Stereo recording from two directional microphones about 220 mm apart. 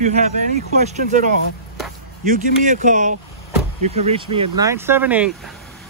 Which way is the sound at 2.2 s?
35° right (ahead or behind).